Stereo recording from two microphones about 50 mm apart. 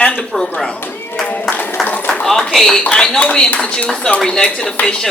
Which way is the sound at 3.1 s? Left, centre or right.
Centre.